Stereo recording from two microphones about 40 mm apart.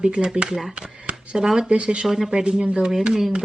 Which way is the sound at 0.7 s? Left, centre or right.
Right.